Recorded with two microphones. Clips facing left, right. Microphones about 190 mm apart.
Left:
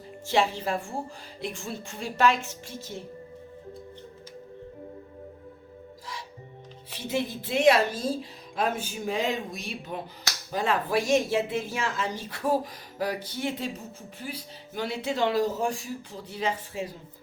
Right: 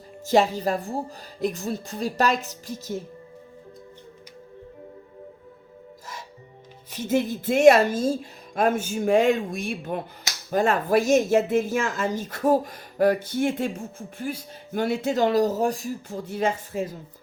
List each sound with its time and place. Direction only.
0.3 s a woman's voice: 40° right (ahead or behind)
6.9 s speech: 45° right (ahead or behind)